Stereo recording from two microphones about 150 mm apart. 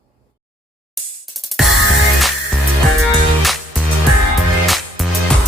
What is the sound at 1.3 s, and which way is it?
Music, centre (ahead or behind).